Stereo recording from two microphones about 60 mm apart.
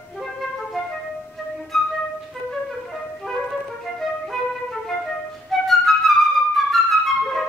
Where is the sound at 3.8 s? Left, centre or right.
Centre.